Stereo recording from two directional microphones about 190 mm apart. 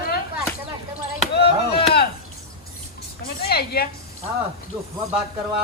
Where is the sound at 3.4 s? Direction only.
55° left (ahead or behind).